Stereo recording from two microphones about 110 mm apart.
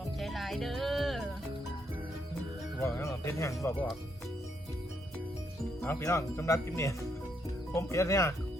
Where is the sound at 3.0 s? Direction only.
25° left (ahead or behind).